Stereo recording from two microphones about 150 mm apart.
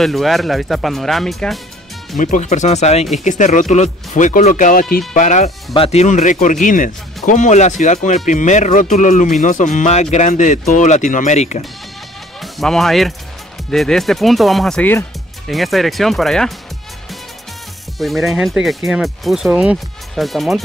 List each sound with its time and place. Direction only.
0.0 s speech: centre (ahead or behind)
2.1 s speech: 60° left (ahead or behind)
12.4 s speech: centre (ahead or behind)
15.4 s speech: centre (ahead or behind)
17.9 s speech: centre (ahead or behind)